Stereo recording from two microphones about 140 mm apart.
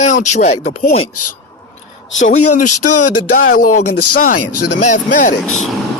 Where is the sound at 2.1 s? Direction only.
60° left (ahead or behind).